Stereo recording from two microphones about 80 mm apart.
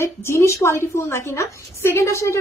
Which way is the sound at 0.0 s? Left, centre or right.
Left.